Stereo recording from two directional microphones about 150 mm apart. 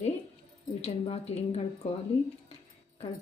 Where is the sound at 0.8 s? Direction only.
45° left (ahead or behind).